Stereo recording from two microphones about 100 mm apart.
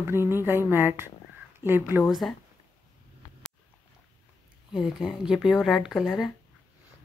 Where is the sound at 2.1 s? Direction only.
Centre (ahead or behind).